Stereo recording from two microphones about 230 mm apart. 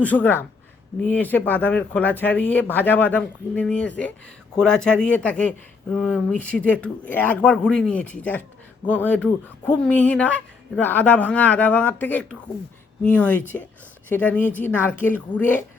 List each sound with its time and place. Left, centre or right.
0.0 s speech: centre